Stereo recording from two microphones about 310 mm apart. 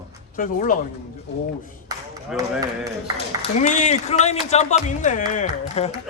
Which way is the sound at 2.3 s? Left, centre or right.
Centre.